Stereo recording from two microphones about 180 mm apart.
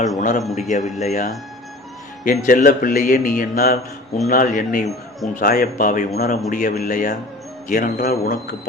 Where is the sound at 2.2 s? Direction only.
50° left (ahead or behind).